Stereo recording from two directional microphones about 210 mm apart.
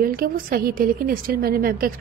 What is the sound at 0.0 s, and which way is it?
A woman's voice, 45° right (ahead or behind).